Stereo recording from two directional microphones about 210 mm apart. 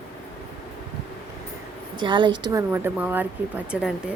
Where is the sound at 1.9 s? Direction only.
20° right (ahead or behind).